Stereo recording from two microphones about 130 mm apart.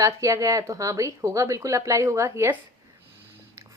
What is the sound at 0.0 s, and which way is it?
A woman's voice, 25° right (ahead or behind).